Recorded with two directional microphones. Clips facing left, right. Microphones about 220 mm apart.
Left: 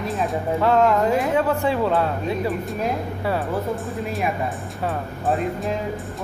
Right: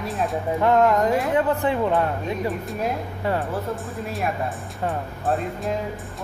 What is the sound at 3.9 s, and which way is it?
Speech, centre (ahead or behind).